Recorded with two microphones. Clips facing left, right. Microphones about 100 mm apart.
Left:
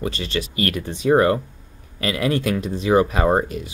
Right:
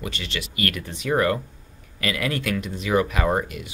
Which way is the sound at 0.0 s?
35° left (ahead or behind).